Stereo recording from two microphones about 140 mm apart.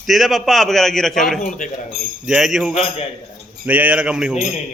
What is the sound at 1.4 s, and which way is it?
Speech, 65° left (ahead or behind).